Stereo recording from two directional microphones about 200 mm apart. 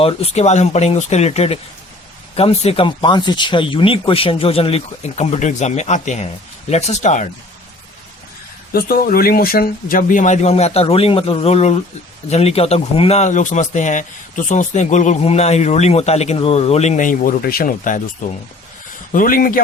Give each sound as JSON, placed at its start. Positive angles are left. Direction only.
{"t": 0.0, "sound": "speech", "side_deg": 30}
{"t": 8.7, "sound": "speech", "side_deg": 50}